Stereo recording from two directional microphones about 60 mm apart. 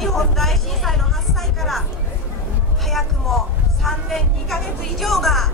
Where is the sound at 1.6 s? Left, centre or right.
Centre.